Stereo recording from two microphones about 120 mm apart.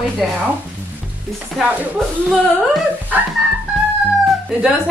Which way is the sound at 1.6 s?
Centre (ahead or behind).